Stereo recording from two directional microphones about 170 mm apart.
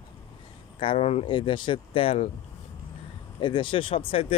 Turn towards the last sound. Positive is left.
turn(degrees=35)  # may be behind; listen again after turning